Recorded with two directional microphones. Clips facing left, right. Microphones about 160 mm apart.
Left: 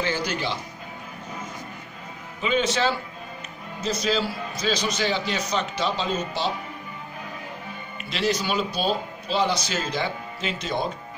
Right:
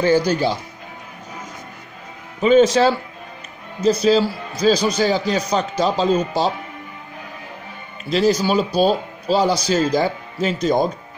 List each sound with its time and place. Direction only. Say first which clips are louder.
0.0 s speech: right 10 dB; 40° right (ahead or behind)
2.4 s speech: right 10 dB; 40° right (ahead or behind)
8.0 s speech: right 9 dB; 35° right (ahead or behind)